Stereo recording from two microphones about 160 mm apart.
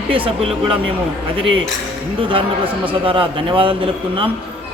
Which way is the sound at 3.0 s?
30° right (ahead or behind).